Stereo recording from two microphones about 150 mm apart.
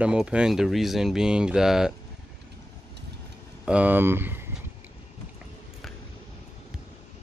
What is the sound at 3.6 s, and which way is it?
Speech, 10° right (ahead or behind).